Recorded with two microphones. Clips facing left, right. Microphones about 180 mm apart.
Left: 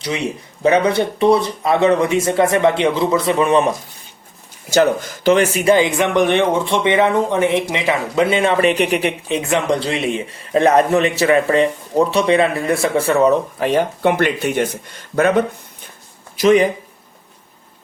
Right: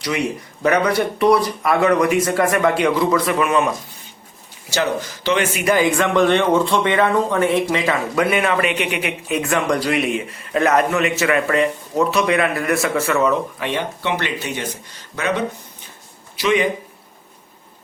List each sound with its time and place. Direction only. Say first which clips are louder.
0.0 s speech: even; 25° left (ahead or behind)
4.7 s speech: left 6 dB; 50° left (ahead or behind)